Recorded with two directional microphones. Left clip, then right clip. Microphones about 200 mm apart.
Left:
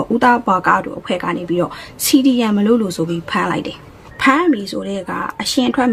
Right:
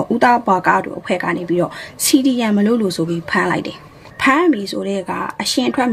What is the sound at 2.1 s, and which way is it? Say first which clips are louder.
Speech: left 2 dB; 55° left (ahead or behind).